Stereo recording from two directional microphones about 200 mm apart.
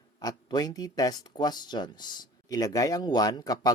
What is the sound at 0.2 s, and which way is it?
Speech, 20° left (ahead or behind).